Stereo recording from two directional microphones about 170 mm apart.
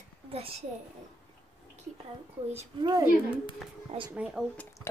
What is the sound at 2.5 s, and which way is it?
Speech, 40° right (ahead or behind).